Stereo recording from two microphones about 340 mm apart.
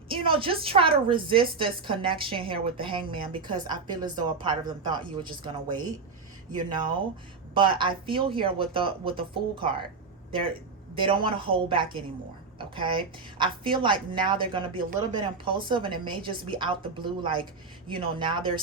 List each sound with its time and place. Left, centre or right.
0.1 s a woman's voice: centre
10.9 s a woman's voice: centre